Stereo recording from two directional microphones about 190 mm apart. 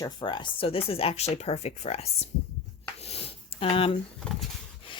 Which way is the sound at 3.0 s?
30° left (ahead or behind).